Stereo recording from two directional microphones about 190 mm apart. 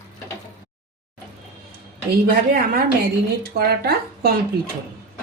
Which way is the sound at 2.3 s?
50° right (ahead or behind).